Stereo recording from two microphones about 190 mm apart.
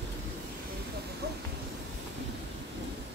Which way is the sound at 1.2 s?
60° right (ahead or behind).